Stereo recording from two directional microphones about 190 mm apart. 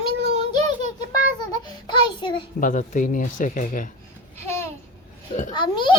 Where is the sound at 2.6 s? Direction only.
45° left (ahead or behind).